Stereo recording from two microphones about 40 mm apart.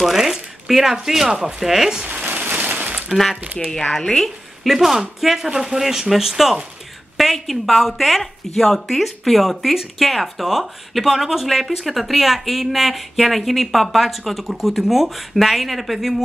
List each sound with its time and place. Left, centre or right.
0.0 s speech: centre
2.2 s a sound: right
3.9 s speech: centre
4.6 s speech: centre